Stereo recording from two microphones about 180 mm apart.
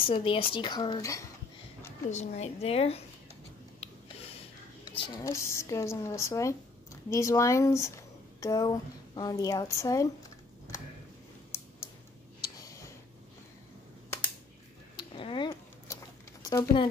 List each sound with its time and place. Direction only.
0.0 s a woman's voice: 30° left (ahead or behind)
2.0 s a woman's voice: 40° left (ahead or behind)
4.9 s a woman's voice: 25° left (ahead or behind)
12.4 s a sound: 20° left (ahead or behind)
15.0 s a sound: 25° left (ahead or behind)
16.4 s speech: 25° left (ahead or behind)